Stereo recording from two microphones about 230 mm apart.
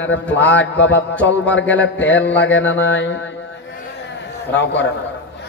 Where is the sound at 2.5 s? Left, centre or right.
Left.